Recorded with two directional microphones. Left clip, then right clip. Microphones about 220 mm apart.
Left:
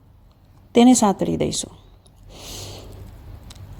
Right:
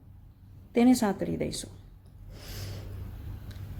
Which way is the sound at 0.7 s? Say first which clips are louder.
Left 10 dB; 30° left (ahead or behind).